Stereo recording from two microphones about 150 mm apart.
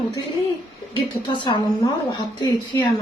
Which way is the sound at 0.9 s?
35° left (ahead or behind).